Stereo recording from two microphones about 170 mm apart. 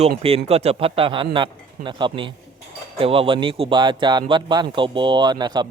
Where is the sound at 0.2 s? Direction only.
35° right (ahead or behind).